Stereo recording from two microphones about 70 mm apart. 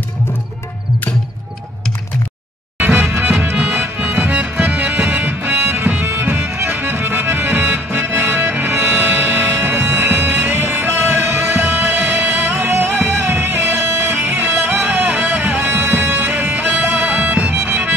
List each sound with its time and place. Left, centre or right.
2.8 s music: right